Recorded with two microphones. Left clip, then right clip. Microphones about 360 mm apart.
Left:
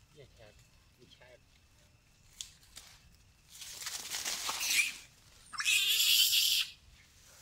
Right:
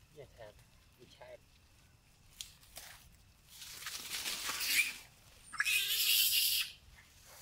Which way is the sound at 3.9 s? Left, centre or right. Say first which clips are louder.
Left 2 dB; centre.